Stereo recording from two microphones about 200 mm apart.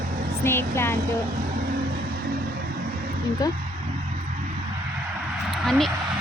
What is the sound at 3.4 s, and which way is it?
Speech, 20° left (ahead or behind).